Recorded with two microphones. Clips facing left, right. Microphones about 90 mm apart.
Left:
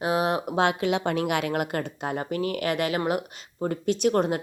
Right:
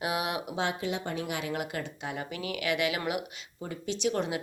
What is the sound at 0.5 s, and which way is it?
Speech, 65° left (ahead or behind).